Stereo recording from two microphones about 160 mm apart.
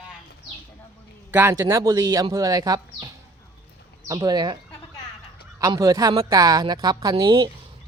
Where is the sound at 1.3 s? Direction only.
15° right (ahead or behind).